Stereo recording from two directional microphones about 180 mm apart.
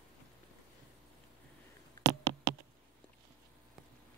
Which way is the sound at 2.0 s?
70° right (ahead or behind).